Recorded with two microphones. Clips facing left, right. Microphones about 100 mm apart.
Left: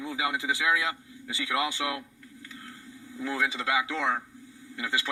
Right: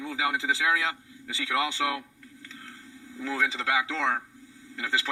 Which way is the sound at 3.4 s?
15° left (ahead or behind).